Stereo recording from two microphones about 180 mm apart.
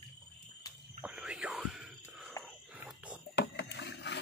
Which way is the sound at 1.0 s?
5° right (ahead or behind).